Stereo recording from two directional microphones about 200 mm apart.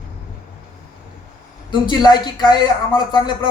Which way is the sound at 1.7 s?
20° left (ahead or behind).